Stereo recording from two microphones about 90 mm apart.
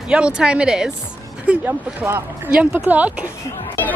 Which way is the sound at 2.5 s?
10° right (ahead or behind).